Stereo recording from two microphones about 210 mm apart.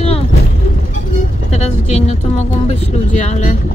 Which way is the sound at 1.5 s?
30° left (ahead or behind).